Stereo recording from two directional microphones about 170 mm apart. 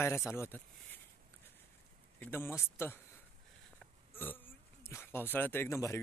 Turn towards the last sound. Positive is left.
turn(degrees=15)  # may be behind; listen again after turning